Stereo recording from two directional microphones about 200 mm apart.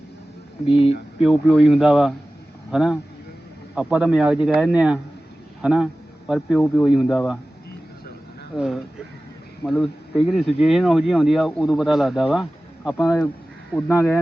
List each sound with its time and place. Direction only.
0.7 s speech: 30° left (ahead or behind)
1.2 s speech: centre (ahead or behind)
8.5 s speech: 5° right (ahead or behind); by 14.2 s 15° left (ahead or behind)